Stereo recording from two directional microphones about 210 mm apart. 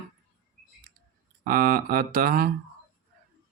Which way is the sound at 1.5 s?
45° right (ahead or behind).